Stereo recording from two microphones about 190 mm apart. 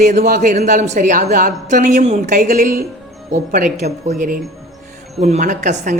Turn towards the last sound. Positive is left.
turn(degrees=-40)  # may be behind; listen again after turning